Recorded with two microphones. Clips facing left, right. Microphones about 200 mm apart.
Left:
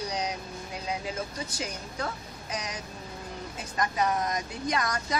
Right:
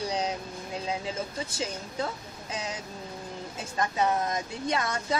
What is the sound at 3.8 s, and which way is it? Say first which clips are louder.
Speech: right 1 dB; 25° right (ahead or behind).